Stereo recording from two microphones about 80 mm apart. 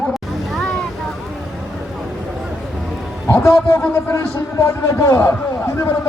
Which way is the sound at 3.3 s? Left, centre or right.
Left.